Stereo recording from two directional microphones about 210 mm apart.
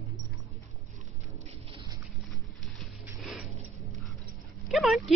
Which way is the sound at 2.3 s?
Centre (ahead or behind).